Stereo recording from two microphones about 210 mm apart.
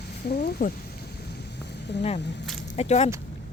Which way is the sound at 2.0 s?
30° left (ahead or behind).